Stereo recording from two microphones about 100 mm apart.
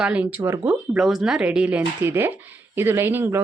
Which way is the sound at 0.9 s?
5° right (ahead or behind).